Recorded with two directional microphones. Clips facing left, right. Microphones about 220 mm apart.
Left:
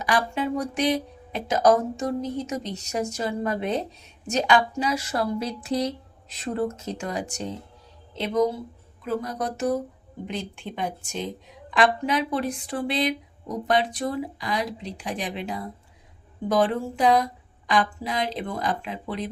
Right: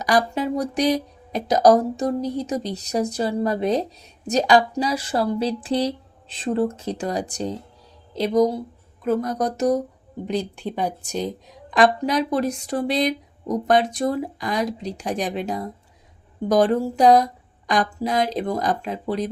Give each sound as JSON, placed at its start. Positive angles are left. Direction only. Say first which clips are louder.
{"t": 0.0, "sound": "speech", "louder": "right 4 dB", "side_deg": -40}